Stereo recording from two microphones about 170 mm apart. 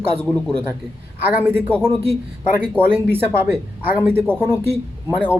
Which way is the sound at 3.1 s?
10° right (ahead or behind).